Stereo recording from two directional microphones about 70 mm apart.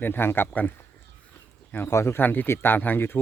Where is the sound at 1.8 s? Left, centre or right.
Left.